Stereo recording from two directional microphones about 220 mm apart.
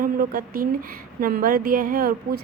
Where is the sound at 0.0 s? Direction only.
40° right (ahead or behind).